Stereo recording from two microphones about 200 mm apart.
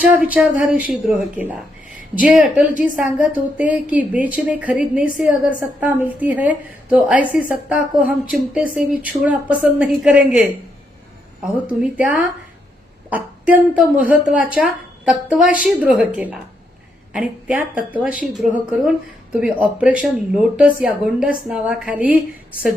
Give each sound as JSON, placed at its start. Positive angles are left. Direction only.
{"t": 0.1, "sound": "a woman's voice", "side_deg": -5}
{"t": 11.5, "sound": "a woman's voice", "side_deg": -5}
{"t": 19.4, "sound": "speech", "side_deg": -5}